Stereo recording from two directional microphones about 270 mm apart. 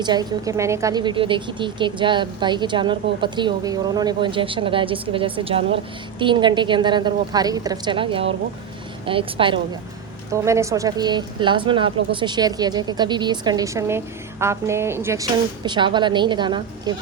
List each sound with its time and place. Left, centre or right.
0.0 s a woman's voice: centre